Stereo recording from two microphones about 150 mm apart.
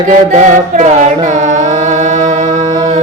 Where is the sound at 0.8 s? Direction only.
55° right (ahead or behind).